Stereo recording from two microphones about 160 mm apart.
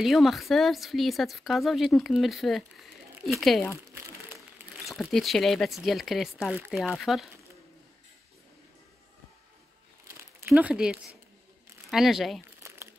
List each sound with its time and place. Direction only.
0.0 s speech: centre (ahead or behind)
3.7 s crumpling: 15° right (ahead or behind)
4.8 s speech: centre (ahead or behind)
10.4 s speech: 5° right (ahead or behind)
12.6 s crumpling: 20° right (ahead or behind)